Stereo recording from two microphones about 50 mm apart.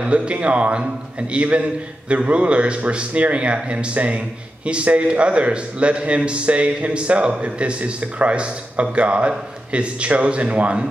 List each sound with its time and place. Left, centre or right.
0.0 s a man's voice: right